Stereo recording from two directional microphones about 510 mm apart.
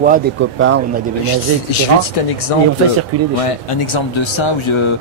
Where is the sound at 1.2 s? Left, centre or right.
Left.